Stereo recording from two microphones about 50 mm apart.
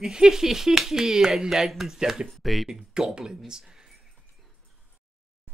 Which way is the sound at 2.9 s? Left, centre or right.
Centre.